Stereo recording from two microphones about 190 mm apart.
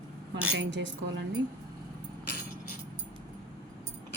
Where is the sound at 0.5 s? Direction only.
70° right (ahead or behind).